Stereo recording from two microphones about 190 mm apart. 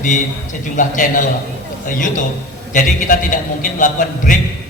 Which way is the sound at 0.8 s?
45° left (ahead or behind).